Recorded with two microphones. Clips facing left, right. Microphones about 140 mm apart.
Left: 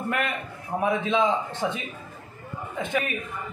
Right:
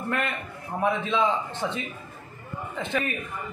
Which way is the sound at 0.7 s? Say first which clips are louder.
Left 1 dB; 15° left (ahead or behind).